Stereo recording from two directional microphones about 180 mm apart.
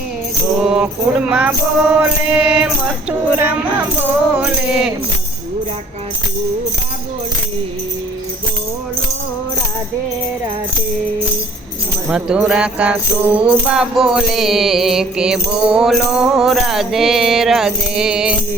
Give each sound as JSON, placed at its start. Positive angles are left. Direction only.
{"t": 0.6, "sound": "music", "side_deg": -5}
{"t": 1.3, "sound": "speech", "side_deg": -5}
{"t": 2.0, "sound": "music", "side_deg": -5}
{"t": 3.1, "sound": "speech", "side_deg": -10}
{"t": 12.0, "sound": "music", "side_deg": -5}